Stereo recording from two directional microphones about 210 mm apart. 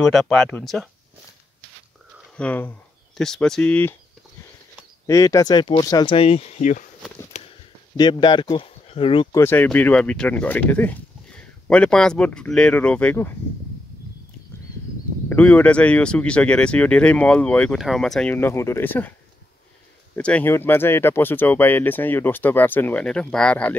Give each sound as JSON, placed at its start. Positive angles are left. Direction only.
{"t": 0.0, "sound": "speech", "side_deg": 5}
{"t": 2.3, "sound": "speech", "side_deg": 5}
{"t": 5.0, "sound": "speech", "side_deg": 15}
{"t": 7.3, "sound": "a sound", "side_deg": 30}
{"t": 7.9, "sound": "speech", "side_deg": 20}
{"t": 9.4, "sound": "speech", "side_deg": 10}
{"t": 15.2, "sound": "speech", "side_deg": 5}
{"t": 20.2, "sound": "speech", "side_deg": 5}